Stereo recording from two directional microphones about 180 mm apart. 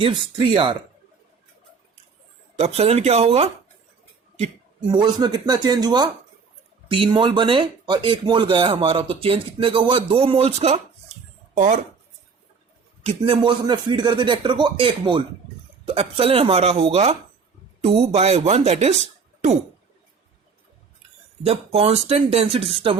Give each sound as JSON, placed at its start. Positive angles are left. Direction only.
{"t": 0.0, "sound": "speech", "side_deg": -30}
{"t": 2.6, "sound": "speech", "side_deg": -35}
{"t": 4.8, "sound": "speech", "side_deg": -25}
{"t": 13.0, "sound": "speech", "side_deg": -30}
{"t": 21.4, "sound": "speech", "side_deg": -35}